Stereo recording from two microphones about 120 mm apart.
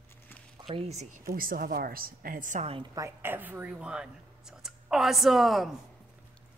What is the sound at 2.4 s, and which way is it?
Speech, 90° right.